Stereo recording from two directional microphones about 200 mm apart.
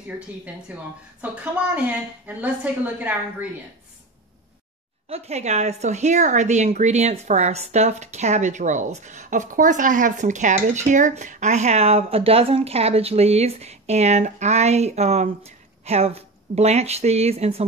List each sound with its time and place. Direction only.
0.7 s a woman's voice: 5° right (ahead or behind)
5.1 s a woman's voice: 30° right (ahead or behind)